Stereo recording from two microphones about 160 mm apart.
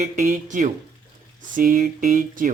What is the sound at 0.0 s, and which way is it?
Speech, 50° right (ahead or behind).